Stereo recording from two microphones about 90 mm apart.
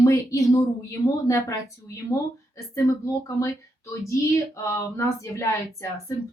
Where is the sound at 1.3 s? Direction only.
35° left (ahead or behind).